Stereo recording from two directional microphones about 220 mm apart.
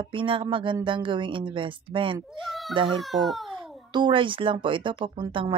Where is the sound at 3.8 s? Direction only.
20° right (ahead or behind).